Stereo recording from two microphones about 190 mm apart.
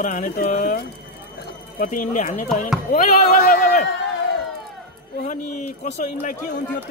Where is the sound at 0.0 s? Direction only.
45° left (ahead or behind).